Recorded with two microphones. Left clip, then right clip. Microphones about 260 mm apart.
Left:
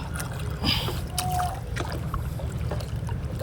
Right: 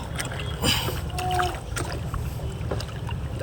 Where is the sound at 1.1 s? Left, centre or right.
Left.